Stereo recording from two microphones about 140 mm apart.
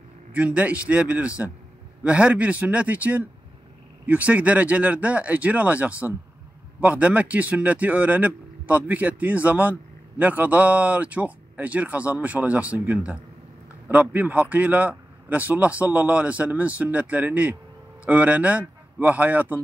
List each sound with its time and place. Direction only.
0.3 s speech: 10° right (ahead or behind)